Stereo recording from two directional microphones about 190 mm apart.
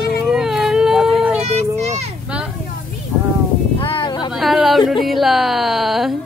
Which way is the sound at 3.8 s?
25° left (ahead or behind).